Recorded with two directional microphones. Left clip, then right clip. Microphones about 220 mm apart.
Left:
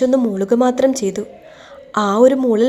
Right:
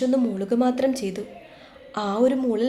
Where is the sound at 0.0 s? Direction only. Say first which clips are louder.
Left 8 dB; 25° left (ahead or behind).